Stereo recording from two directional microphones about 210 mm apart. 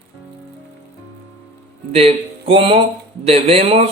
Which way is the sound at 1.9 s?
30° right (ahead or behind).